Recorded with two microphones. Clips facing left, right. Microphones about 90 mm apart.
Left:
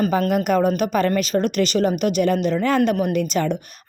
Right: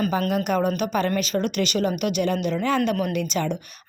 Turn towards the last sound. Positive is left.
turn(degrees=40)  # may be behind; listen again after turning